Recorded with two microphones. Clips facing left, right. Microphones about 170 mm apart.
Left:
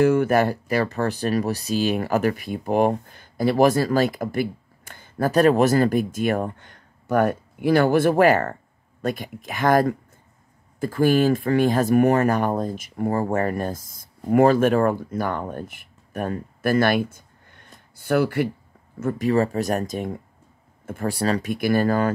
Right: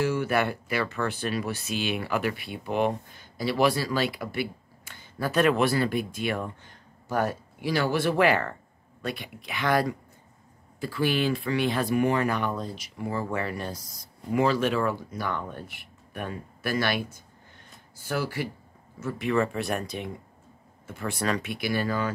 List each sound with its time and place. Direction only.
0.0 s speech: 55° left (ahead or behind)
0.4 s speech: 40° left (ahead or behind)
6.6 s speech: 60° left (ahead or behind)
19.1 s speech: 35° left (ahead or behind)
21.1 s speech: 35° left (ahead or behind); by 22.1 s 50° left (ahead or behind)